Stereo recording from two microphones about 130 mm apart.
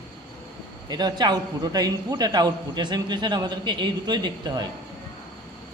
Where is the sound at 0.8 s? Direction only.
35° right (ahead or behind).